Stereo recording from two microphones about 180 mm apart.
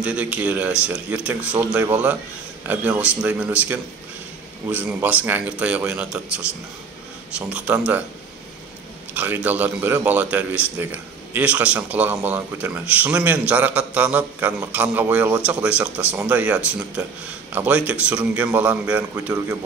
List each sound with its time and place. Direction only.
0.0 s a man's voice: 5° right (ahead or behind)
9.1 s a man's voice: 10° right (ahead or behind)